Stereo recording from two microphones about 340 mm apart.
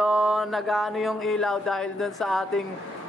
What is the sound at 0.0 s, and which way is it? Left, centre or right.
Speech, centre.